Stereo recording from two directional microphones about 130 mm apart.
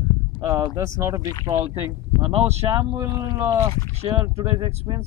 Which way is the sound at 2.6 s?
35° right (ahead or behind).